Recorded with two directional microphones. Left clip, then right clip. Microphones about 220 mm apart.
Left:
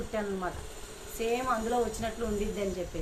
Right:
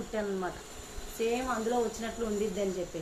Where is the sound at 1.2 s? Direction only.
10° left (ahead or behind).